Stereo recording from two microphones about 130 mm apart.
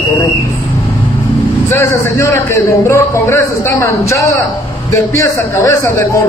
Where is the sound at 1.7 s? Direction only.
20° left (ahead or behind).